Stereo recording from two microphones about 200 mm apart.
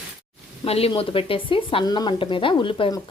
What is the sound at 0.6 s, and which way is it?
Speech, 30° left (ahead or behind).